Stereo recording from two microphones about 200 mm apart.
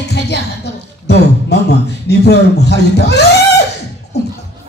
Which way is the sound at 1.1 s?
55° left (ahead or behind).